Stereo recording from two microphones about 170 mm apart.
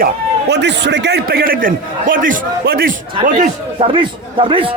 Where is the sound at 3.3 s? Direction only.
35° right (ahead or behind).